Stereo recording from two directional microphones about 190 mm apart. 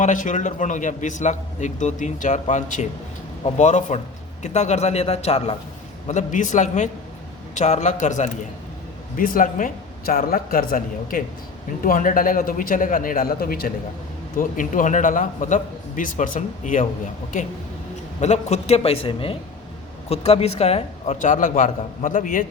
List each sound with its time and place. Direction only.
0.0 s a man's voice: 40° left (ahead or behind)
18.2 s a man's voice: 35° left (ahead or behind)